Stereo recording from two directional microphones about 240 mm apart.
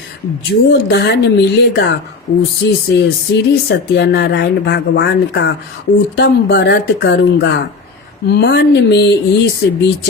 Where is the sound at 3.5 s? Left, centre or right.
Left.